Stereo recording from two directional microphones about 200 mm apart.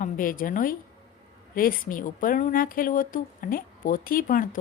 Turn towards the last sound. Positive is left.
turn(degrees=45)  # may be behind; listen again after turning